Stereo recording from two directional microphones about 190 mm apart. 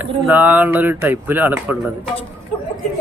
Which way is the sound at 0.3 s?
10° right (ahead or behind).